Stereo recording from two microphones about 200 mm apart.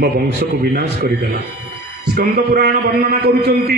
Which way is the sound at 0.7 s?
50° right (ahead or behind).